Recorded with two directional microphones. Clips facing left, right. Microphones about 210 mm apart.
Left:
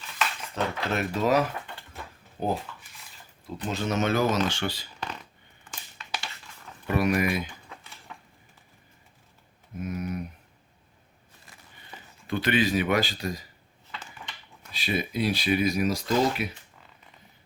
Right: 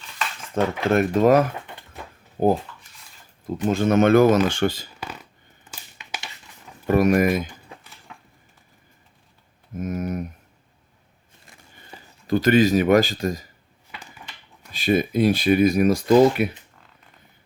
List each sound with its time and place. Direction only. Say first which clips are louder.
0.5 s speech: right 10 dB; 50° right (ahead or behind)
4.9 s a sound: right 1 dB; 5° right (ahead or behind)
6.8 s speech: right 7 dB; 45° right (ahead or behind)
9.7 s speech: right 5 dB; 45° right (ahead or behind)
11.9 s speech: right 9 dB; 40° right (ahead or behind)
14.7 s speech: right 9 dB; 45° right (ahead or behind)